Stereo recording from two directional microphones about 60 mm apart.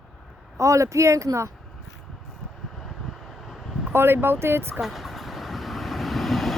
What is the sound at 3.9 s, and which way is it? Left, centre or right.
Speech, right.